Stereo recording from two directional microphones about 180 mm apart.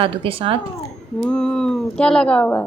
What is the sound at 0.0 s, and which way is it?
Speech, 30° right (ahead or behind).